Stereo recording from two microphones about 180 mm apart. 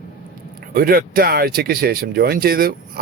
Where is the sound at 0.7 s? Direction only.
55° right (ahead or behind).